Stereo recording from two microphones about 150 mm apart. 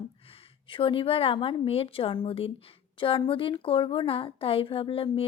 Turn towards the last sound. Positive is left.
turn(degrees=40)  # may be behind; listen again after turning